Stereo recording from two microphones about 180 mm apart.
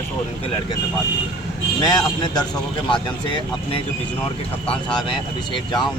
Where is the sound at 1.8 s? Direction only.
25° left (ahead or behind).